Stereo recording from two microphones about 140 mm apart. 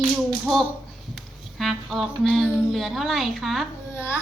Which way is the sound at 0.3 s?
Centre (ahead or behind).